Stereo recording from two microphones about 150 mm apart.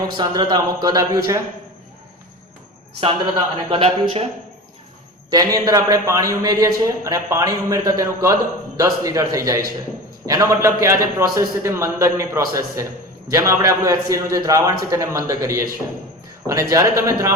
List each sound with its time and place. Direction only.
0.2 s a man's voice: 30° right (ahead or behind)
3.7 s speech: 40° right (ahead or behind)
5.3 s a man's voice: 25° right (ahead or behind)